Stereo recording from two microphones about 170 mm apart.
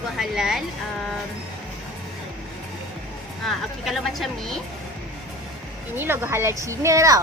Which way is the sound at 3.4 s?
Centre (ahead or behind).